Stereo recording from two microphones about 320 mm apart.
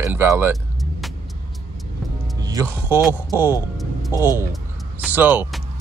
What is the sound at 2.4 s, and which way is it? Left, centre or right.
Speech, centre.